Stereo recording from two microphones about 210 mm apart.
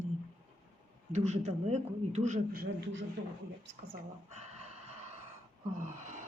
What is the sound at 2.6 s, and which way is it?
Speech, 60° right (ahead or behind).